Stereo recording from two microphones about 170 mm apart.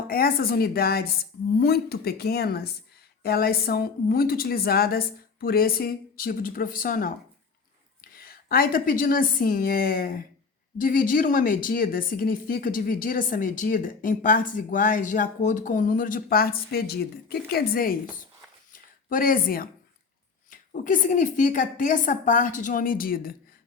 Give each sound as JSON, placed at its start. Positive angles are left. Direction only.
{"t": 0.1, "sound": "a woman's voice", "side_deg": 60}
{"t": 8.1, "sound": "a woman's voice", "side_deg": 60}
{"t": 18.7, "sound": "a sound", "side_deg": 55}
{"t": 20.5, "sound": "speech", "side_deg": 50}